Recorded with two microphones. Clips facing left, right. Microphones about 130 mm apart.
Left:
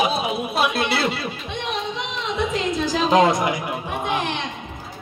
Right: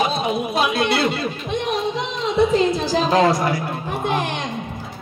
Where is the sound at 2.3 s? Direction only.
35° right (ahead or behind).